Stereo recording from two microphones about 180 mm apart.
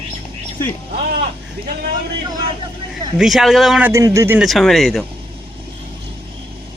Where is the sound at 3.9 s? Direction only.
15° right (ahead or behind).